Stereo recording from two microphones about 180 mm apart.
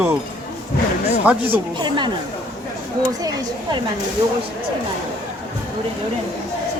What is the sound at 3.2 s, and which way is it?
Speech, 20° right (ahead or behind).